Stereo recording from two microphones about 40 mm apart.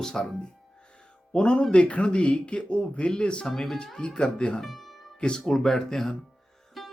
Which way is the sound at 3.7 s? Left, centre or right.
Left.